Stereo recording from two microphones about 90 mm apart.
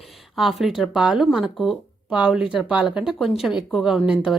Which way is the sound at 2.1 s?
10° right (ahead or behind).